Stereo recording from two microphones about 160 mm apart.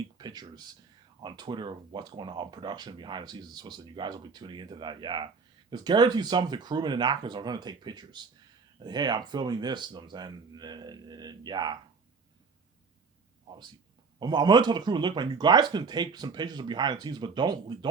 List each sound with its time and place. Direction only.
0.2 s speech: 25° right (ahead or behind)
14.2 s speech: 25° right (ahead or behind)